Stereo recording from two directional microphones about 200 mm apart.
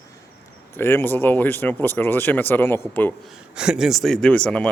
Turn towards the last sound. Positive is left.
turn(degrees=5)  # may be behind; listen again after turning